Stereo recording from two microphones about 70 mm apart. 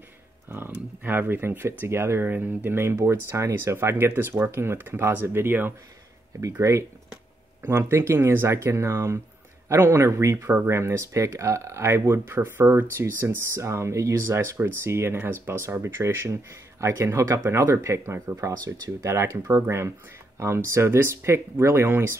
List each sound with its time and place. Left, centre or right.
0.5 s speech: right
6.6 s speech: right
11.8 s speech: right